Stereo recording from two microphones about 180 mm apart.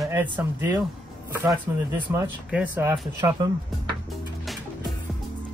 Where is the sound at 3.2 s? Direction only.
25° right (ahead or behind).